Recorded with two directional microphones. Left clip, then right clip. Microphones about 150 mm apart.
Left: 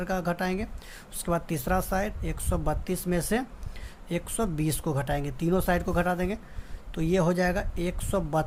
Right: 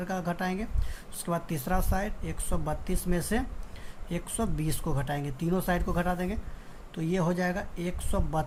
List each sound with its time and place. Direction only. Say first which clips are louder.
0.0 s speech: left 3 dB; 45° left (ahead or behind)